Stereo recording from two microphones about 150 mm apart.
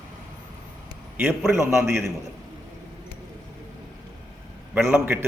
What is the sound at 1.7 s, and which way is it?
Speech, 20° right (ahead or behind).